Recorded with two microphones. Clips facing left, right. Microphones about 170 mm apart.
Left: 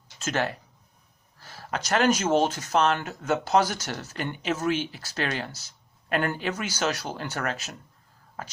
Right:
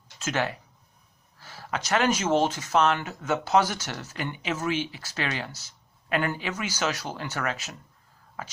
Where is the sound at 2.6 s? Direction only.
40° left (ahead or behind).